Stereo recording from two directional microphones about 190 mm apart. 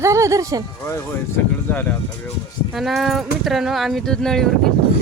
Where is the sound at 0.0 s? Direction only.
15° right (ahead or behind).